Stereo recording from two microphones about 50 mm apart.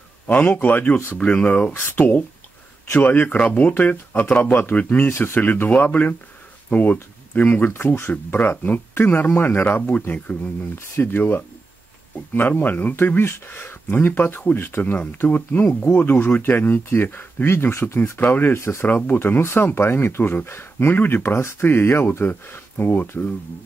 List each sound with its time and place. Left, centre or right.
0.3 s speech: left
3.3 s speech: left
11.0 s speech: left
14.8 s speech: left
17.5 s speech: left
18.2 s speech: left
18.5 s speech: left
18.9 s speech: left
19.1 s speech: left
21.6 s speech: left